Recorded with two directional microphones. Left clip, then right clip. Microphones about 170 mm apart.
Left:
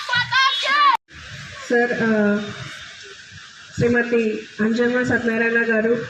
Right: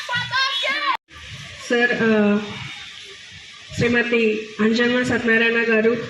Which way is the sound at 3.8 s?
5° left (ahead or behind).